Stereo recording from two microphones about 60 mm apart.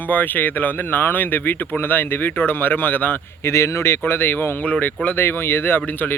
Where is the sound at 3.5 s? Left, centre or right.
Left.